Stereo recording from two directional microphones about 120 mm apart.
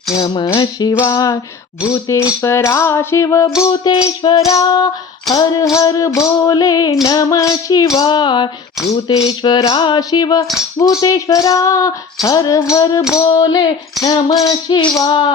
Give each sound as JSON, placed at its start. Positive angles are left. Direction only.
{"t": 0.3, "sound": "music", "side_deg": 45}
{"t": 1.0, "sound": "music", "side_deg": 30}
{"t": 1.9, "sound": "a sound", "side_deg": 25}
{"t": 4.2, "sound": "music", "side_deg": 45}
{"t": 5.7, "sound": "a sound", "side_deg": 30}
{"t": 6.5, "sound": "music", "side_deg": 30}
{"t": 7.0, "sound": "a sound", "side_deg": 30}
{"t": 7.9, "sound": "music", "side_deg": 40}
{"t": 10.8, "sound": "a sound", "side_deg": 30}
{"t": 12.7, "sound": "music", "side_deg": 30}
{"t": 14.1, "sound": "music", "side_deg": 45}
{"t": 14.4, "sound": "music", "side_deg": 35}